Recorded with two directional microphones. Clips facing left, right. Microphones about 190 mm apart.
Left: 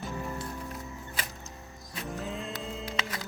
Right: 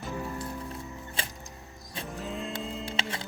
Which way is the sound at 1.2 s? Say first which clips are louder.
Right 1 dB; 30° right (ahead or behind).